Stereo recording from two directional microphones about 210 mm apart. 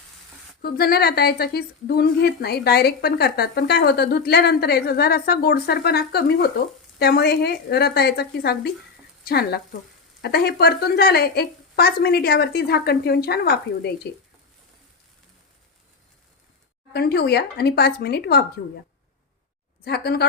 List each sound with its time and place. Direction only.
0.6 s a woman's voice: 45° left (ahead or behind)
16.9 s a woman's voice: 50° left (ahead or behind)
19.8 s a woman's voice: 50° left (ahead or behind)